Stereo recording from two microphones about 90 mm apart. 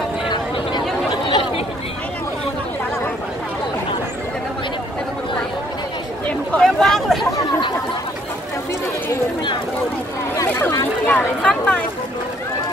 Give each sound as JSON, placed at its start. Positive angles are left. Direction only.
{"t": 1.1, "sound": "chatter", "side_deg": 60}
{"t": 6.2, "sound": "chatter", "side_deg": 10}
{"t": 11.1, "sound": "chatter", "side_deg": 20}